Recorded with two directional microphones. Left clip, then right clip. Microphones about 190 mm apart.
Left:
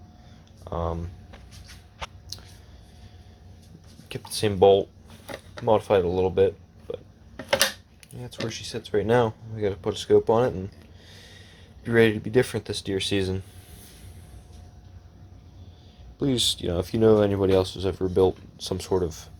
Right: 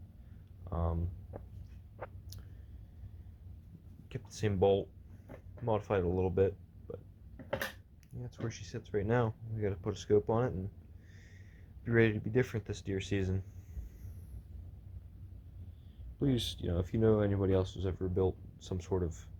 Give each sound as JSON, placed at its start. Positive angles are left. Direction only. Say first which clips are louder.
{"t": 0.6, "sound": "a sound", "louder": "left 10 dB", "side_deg": 10}
{"t": 2.3, "sound": "a sound", "louder": "left 17 dB", "side_deg": 5}
{"t": 4.1, "sound": "speech", "louder": "left 11 dB", "side_deg": 20}
{"t": 8.2, "sound": "speech", "louder": "left 12 dB", "side_deg": 15}
{"t": 11.1, "sound": "snort", "louder": "left 14 dB", "side_deg": 15}
{"t": 11.8, "sound": "speech", "louder": "left 10 dB", "side_deg": 20}
{"t": 16.2, "sound": "speech", "louder": "left 11 dB", "side_deg": 10}